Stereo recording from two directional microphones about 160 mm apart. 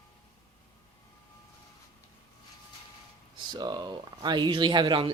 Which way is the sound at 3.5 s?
25° right (ahead or behind).